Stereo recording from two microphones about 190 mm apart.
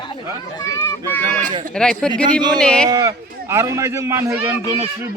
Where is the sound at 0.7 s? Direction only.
15° left (ahead or behind).